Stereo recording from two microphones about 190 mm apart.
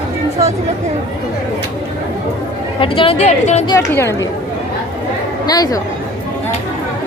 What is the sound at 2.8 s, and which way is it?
Speech, 30° left (ahead or behind).